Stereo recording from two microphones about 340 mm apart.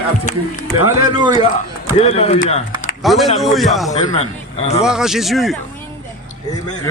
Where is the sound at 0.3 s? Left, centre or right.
Centre.